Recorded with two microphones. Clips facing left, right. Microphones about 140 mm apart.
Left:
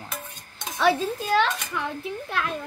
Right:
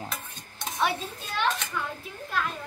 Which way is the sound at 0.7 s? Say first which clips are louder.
Left 7 dB; 90° left.